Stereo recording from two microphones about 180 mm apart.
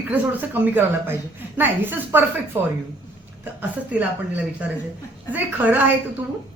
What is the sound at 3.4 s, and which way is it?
A woman's voice, 10° right (ahead or behind).